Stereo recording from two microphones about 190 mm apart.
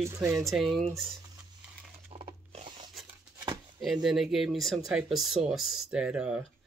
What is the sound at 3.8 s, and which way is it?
Speech, centre (ahead or behind).